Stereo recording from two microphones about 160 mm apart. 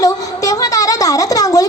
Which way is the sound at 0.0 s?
20° left (ahead or behind).